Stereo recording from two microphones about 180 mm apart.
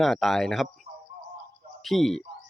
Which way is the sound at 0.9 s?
45° right (ahead or behind).